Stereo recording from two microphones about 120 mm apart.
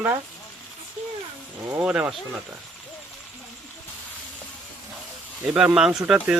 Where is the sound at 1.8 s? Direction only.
10° right (ahead or behind).